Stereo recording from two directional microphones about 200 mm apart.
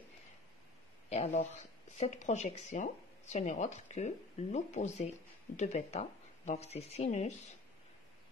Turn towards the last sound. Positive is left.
turn(degrees=35)  # may be behind; listen again after turning